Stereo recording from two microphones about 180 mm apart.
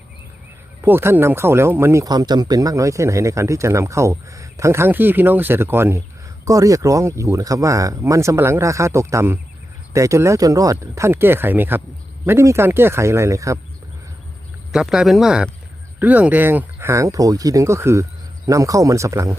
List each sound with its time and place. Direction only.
0.8 s speech: 10° right (ahead or behind)
14.7 s speech: 5° right (ahead or behind)